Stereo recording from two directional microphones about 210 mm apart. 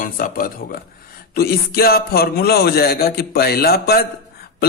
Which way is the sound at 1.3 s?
45° left (ahead or behind).